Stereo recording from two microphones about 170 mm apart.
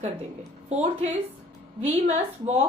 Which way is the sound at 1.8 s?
40° right (ahead or behind).